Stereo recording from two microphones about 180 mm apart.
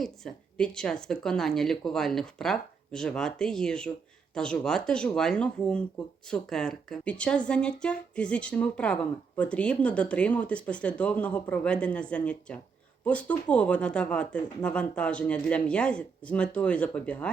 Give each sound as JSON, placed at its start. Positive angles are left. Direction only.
{"t": 0.0, "sound": "a woman's voice", "side_deg": 5}